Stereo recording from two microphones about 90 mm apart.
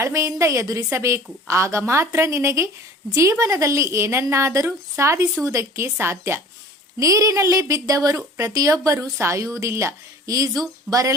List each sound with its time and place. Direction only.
0.0 s a woman's voice: 35° right (ahead or behind)